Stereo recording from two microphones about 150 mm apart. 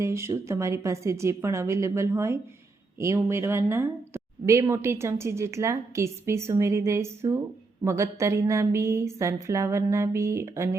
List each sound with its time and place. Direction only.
0.0 s speech: 20° right (ahead or behind)